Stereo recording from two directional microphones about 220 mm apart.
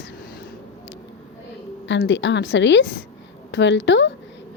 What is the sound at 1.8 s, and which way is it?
A woman's voice, 55° left (ahead or behind).